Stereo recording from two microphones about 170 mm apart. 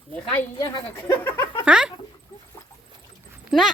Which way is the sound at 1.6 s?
5° right (ahead or behind).